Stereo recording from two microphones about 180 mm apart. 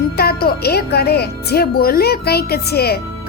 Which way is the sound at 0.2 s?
60° left (ahead or behind).